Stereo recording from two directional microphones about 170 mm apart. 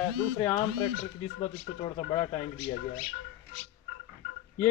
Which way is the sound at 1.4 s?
25° left (ahead or behind).